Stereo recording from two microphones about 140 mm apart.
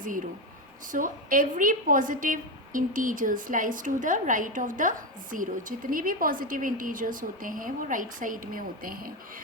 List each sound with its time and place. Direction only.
0.9 s a woman's voice: 75° right (ahead or behind); by 9.1 s 90° right